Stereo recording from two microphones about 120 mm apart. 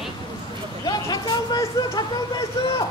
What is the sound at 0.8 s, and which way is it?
Speech, 35° left (ahead or behind).